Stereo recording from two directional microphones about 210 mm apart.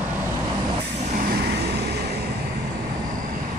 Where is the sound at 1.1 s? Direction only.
45° right (ahead or behind).